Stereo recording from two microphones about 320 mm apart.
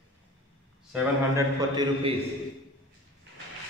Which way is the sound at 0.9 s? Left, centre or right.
Centre.